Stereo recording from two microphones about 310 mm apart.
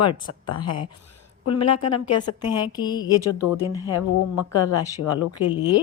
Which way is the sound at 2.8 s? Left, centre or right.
Centre.